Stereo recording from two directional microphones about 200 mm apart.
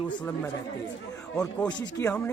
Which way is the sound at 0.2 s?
10° left (ahead or behind).